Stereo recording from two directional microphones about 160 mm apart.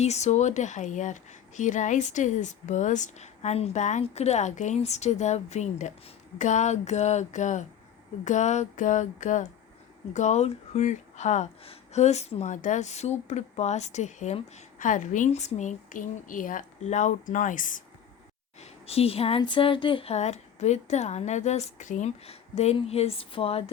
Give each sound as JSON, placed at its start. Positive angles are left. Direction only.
{"t": 0.0, "sound": "speech", "side_deg": 45}
{"t": 18.6, "sound": "speech", "side_deg": 40}